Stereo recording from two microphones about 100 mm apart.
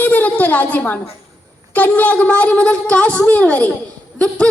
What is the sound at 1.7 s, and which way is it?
A woman's voice, 15° left (ahead or behind).